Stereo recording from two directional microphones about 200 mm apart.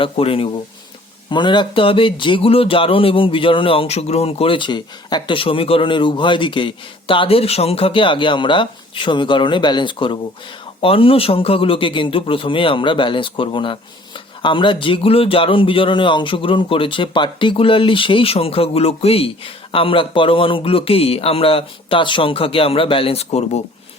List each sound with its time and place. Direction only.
0.0 s speech: 25° left (ahead or behind)